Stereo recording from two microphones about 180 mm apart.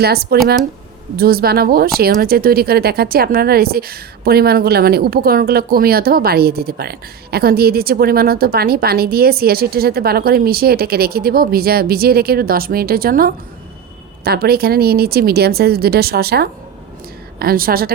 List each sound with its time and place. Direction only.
0.0 s speech: 60° right (ahead or behind)